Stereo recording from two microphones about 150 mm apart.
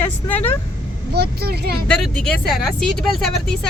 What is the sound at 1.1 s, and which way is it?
Speech, 90° right.